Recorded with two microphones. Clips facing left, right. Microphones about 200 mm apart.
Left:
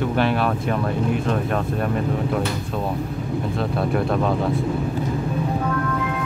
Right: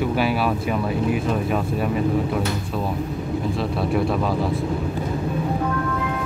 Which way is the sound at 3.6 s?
Centre (ahead or behind).